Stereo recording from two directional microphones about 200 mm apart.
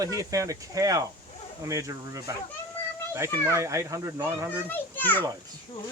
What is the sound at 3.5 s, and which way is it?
Speech, 15° right (ahead or behind).